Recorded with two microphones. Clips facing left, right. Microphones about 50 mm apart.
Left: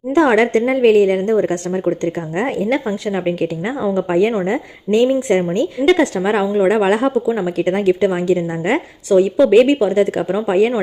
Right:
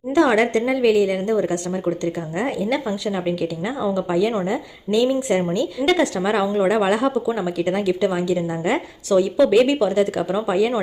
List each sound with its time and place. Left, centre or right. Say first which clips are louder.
0.1 s a woman's voice: left 4 dB; left
6.4 s a woman's voice: left 4 dB; left
7.6 s a woman's voice: left 5 dB; left